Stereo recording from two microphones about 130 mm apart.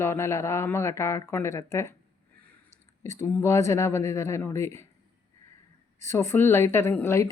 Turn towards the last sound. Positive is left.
turn(degrees=20)  # may be behind; listen again after turning